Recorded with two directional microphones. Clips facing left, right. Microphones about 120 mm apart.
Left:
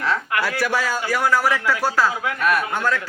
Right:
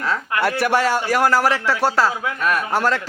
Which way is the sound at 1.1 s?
80° right.